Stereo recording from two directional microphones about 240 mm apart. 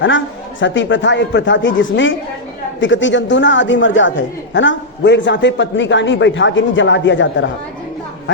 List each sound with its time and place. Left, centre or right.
0.6 s a man's voice: left